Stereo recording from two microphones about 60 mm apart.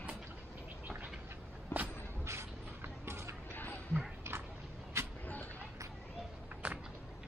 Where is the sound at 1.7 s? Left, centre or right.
Left.